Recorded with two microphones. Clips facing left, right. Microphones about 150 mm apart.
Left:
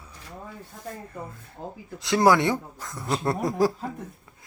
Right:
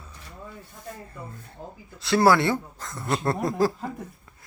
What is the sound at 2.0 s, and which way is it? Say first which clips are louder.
Speech: even; 15° left (ahead or behind).